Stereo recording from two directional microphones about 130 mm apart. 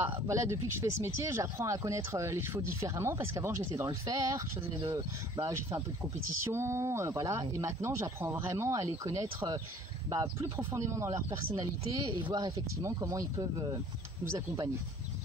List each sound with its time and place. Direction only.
0.3 s speech: 20° right (ahead or behind)
12.1 s speech: 35° right (ahead or behind); by 14.7 s 20° right (ahead or behind)